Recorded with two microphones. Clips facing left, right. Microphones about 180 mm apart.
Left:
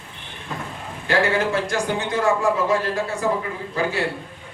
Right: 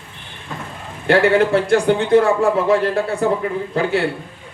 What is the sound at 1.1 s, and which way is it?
A man's voice, 60° right (ahead or behind).